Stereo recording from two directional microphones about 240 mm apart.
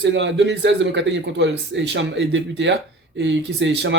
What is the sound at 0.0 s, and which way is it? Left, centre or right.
A man's voice, right.